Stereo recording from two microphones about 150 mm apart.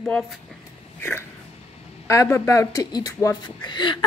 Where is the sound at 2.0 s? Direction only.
20° left (ahead or behind).